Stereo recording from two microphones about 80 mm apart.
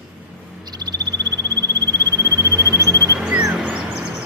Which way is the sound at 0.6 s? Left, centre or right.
Right.